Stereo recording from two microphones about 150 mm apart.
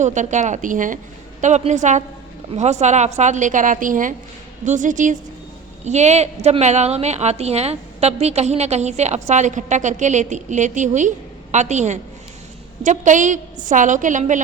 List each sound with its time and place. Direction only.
0.0 s a woman's voice: 55° right (ahead or behind)